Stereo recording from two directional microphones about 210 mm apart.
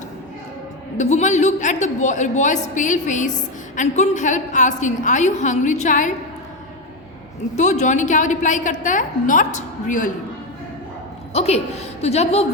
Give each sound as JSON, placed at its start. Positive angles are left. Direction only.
{"t": 0.9, "sound": "a woman's voice", "side_deg": 35}
{"t": 7.5, "sound": "a woman's voice", "side_deg": 35}
{"t": 11.3, "sound": "a woman's voice", "side_deg": 30}